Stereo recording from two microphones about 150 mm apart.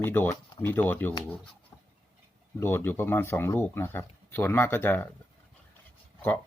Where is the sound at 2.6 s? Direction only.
15° left (ahead or behind).